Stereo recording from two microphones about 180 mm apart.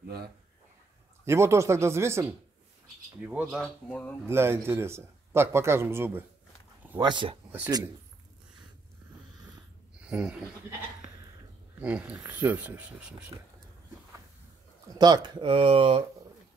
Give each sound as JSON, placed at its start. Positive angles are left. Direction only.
{"t": 1.2, "sound": "speech", "side_deg": -15}
{"t": 3.9, "sound": "speech", "side_deg": 10}
{"t": 4.3, "sound": "speech", "side_deg": -15}
{"t": 7.0, "sound": "speech", "side_deg": -25}
{"t": 10.0, "sound": "speech", "side_deg": -5}
{"t": 11.8, "sound": "speech", "side_deg": -10}
{"t": 15.0, "sound": "speech", "side_deg": -25}